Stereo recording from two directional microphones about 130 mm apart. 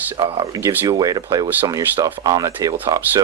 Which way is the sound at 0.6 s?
15° right (ahead or behind).